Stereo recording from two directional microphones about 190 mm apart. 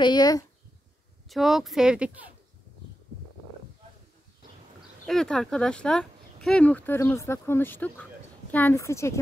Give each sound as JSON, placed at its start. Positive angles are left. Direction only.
{"t": 0.0, "sound": "speech", "side_deg": 20}
{"t": 1.3, "sound": "speech", "side_deg": 0}
{"t": 5.0, "sound": "speech", "side_deg": 0}